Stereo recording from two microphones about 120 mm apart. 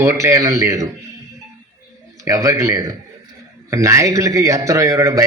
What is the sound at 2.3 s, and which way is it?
A man's voice, 25° right (ahead or behind).